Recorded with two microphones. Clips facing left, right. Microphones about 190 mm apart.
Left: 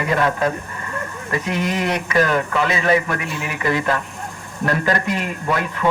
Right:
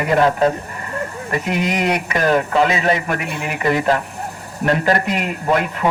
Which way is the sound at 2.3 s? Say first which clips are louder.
Right 4 dB; 35° right (ahead or behind).